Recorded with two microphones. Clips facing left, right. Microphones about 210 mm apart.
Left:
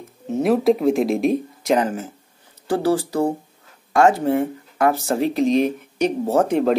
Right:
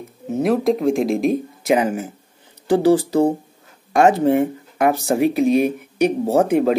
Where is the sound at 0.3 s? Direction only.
Centre (ahead or behind).